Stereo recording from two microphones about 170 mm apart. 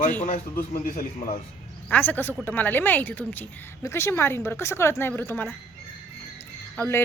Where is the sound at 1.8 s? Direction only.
10° left (ahead or behind).